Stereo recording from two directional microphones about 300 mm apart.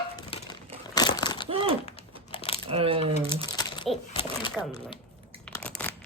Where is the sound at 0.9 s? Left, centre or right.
Centre.